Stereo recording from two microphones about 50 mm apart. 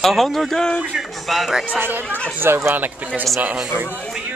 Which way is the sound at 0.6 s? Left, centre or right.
Centre.